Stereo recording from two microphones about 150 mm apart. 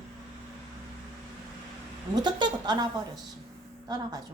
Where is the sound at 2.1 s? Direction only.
30° right (ahead or behind).